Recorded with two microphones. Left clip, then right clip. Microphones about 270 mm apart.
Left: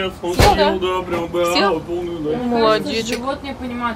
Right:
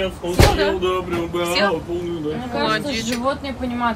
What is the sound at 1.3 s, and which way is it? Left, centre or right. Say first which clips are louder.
Speech: left 3 dB; centre.